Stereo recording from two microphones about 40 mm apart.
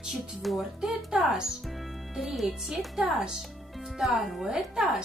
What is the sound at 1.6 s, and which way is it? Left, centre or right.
Speech, centre.